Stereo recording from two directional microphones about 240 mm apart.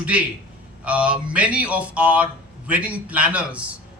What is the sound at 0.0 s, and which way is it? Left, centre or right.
Speech, centre.